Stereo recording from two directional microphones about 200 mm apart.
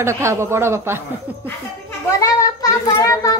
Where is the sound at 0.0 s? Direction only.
15° right (ahead or behind).